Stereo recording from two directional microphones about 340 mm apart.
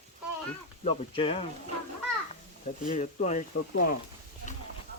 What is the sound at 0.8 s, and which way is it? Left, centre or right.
Speech, centre.